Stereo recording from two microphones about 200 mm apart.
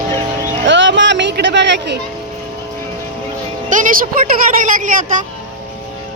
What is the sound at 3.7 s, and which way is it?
A woman's voice, 40° right (ahead or behind).